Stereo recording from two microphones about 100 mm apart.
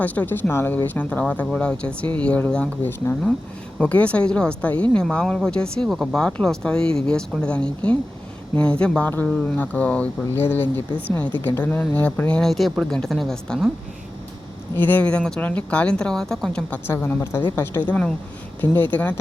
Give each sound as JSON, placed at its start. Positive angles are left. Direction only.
{"t": 0.0, "sound": "speech", "side_deg": 15}
{"t": 12.4, "sound": "a woman's voice", "side_deg": 0}
{"t": 14.8, "sound": "speech", "side_deg": 20}